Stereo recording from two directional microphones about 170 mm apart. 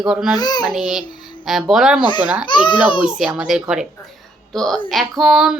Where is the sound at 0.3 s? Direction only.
25° left (ahead or behind).